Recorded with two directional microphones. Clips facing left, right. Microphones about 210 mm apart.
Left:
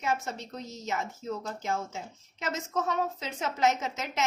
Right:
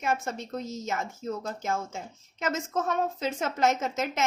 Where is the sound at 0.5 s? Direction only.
50° right (ahead or behind).